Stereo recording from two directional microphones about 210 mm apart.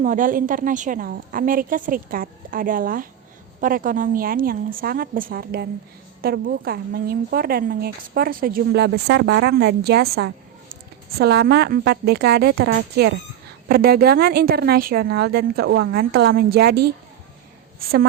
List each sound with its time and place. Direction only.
0.0 s a woman's voice: 40° right (ahead or behind)